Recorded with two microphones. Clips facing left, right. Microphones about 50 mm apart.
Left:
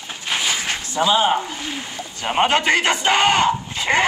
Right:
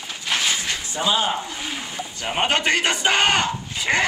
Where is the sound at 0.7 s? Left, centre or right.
Left.